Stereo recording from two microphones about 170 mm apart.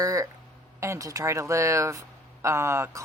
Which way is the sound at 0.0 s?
20° right (ahead or behind).